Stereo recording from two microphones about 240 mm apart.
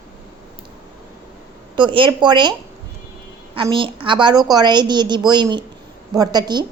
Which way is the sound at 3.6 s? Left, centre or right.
Right.